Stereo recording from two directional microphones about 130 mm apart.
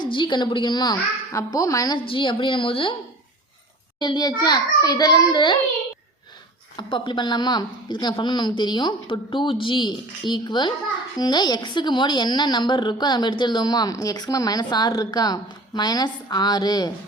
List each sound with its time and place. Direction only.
0.0 s a woman's voice: 40° left (ahead or behind)
2.0 s a woman's voice: 40° left (ahead or behind)
4.0 s a woman's voice: 35° left (ahead or behind)
6.7 s a woman's voice: 40° left (ahead or behind)